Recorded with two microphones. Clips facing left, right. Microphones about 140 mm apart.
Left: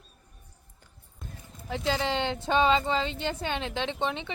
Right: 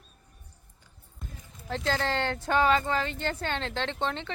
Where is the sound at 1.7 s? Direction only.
15° left (ahead or behind).